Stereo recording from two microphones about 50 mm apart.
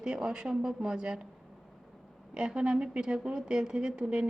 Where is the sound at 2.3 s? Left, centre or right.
Centre.